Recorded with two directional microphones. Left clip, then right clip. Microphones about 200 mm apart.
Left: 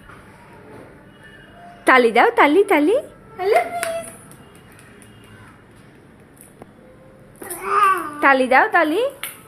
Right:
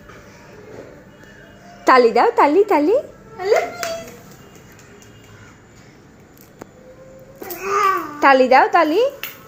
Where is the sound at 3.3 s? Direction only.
30° left (ahead or behind).